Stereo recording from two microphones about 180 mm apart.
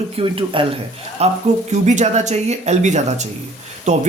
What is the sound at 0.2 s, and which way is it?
Speech, 30° right (ahead or behind).